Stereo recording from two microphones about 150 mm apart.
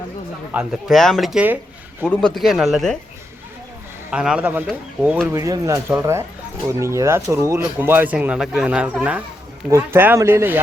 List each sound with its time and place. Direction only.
0.5 s speech: 5° right (ahead or behind)
4.1 s speech: 5° right (ahead or behind)
5.3 s speech: 20° right (ahead or behind)